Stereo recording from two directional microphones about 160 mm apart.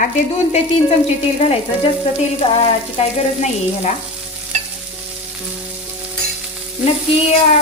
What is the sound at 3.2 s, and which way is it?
Frying, 40° left (ahead or behind).